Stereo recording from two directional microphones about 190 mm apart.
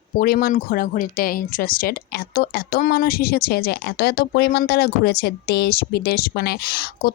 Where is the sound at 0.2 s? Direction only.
50° left (ahead or behind).